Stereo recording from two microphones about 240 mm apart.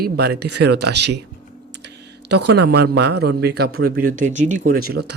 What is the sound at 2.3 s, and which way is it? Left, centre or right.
Speech, right.